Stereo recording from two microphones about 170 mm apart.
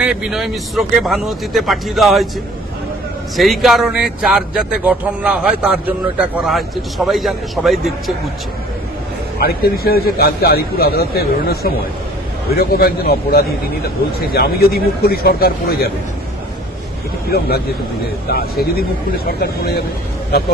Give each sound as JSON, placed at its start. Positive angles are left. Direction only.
{"t": 0.0, "sound": "speech", "side_deg": -5}
{"t": 3.3, "sound": "speech", "side_deg": 0}
{"t": 9.4, "sound": "a man's voice", "side_deg": 65}
{"t": 18.3, "sound": "a man's voice", "side_deg": 65}